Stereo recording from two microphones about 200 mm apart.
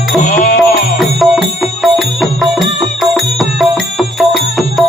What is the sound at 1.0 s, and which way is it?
Music, centre (ahead or behind).